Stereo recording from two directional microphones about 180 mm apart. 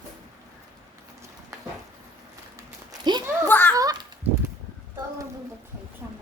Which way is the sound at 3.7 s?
20° right (ahead or behind).